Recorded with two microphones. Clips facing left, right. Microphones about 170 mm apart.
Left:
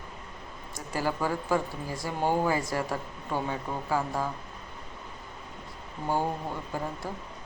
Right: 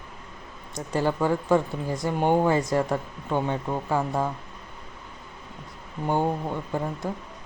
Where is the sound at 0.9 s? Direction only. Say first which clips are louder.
Right 5 dB; 25° right (ahead or behind).